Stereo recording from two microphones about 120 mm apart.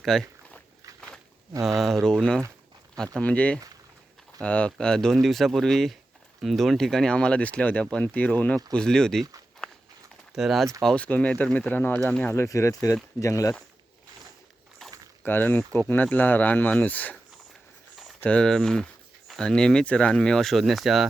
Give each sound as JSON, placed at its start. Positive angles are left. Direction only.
{"t": 0.0, "sound": "a sound", "side_deg": 5}
{"t": 1.8, "sound": "speech", "side_deg": 0}
{"t": 10.3, "sound": "speech", "side_deg": 0}
{"t": 10.8, "sound": "speech", "side_deg": 10}
{"t": 14.8, "sound": "a sound", "side_deg": 5}
{"t": 15.2, "sound": "speech", "side_deg": 15}
{"t": 18.2, "sound": "speech", "side_deg": 10}